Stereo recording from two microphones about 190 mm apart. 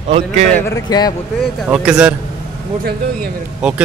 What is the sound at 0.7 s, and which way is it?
Speech, 20° left (ahead or behind).